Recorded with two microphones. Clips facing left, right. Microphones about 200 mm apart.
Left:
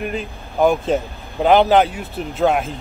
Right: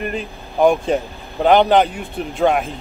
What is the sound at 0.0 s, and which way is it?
Speech, centre (ahead or behind).